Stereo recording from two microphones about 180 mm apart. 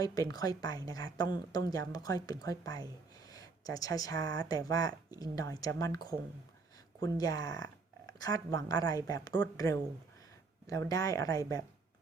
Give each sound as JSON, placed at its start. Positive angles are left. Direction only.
{"t": 0.0, "sound": "speech", "side_deg": 20}